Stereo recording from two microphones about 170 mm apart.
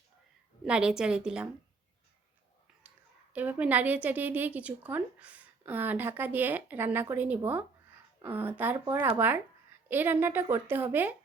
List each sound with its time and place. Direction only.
0.6 s a woman's voice: 5° right (ahead or behind)
3.3 s a woman's voice: 10° right (ahead or behind)